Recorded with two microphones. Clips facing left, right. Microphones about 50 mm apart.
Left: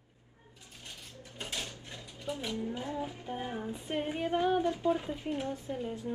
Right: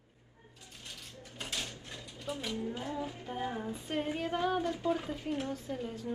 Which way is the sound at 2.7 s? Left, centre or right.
Left.